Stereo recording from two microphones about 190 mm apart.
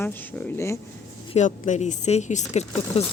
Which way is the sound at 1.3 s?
40° left (ahead or behind).